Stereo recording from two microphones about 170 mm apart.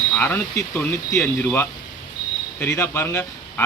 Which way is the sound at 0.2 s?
10° left (ahead or behind).